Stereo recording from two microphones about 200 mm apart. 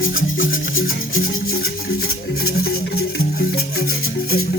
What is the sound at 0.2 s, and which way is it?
Music, 45° left (ahead or behind).